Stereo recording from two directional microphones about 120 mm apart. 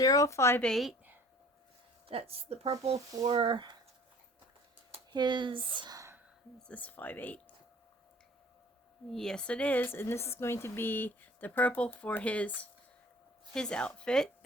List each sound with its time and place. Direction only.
0.0 s a woman's voice: 30° left (ahead or behind)
0.6 s a woman's voice: centre (ahead or behind)
2.0 s speech: 55° right (ahead or behind)
3.2 s speech: 45° right (ahead or behind)
5.1 s speech: 40° right (ahead or behind)
6.6 s speech: 10° left (ahead or behind)
9.0 s speech: 5° left (ahead or behind)